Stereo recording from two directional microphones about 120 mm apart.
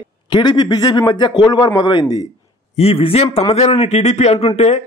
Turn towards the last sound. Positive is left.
turn(degrees=60)  # may be behind; listen again after turning